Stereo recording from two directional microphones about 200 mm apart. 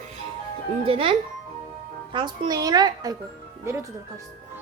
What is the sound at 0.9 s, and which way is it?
Speech, 30° right (ahead or behind).